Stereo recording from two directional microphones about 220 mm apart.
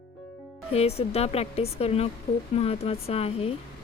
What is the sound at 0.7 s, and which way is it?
Speech, 30° left (ahead or behind).